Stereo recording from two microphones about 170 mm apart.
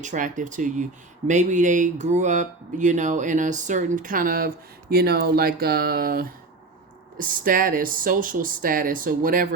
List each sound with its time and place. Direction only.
0.0 s speech: 50° right (ahead or behind)